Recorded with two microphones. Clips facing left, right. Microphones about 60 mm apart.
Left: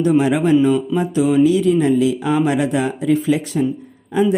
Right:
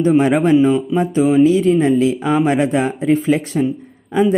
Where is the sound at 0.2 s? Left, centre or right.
Right.